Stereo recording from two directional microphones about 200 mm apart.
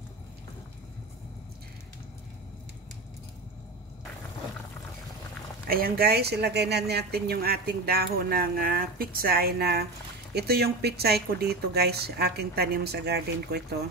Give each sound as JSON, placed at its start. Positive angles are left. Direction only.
{"t": 5.7, "sound": "speech", "side_deg": -50}